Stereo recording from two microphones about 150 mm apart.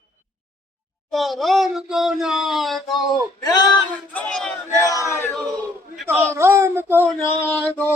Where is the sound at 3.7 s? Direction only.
10° left (ahead or behind).